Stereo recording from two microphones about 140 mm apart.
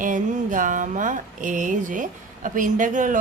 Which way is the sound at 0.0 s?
65° right (ahead or behind).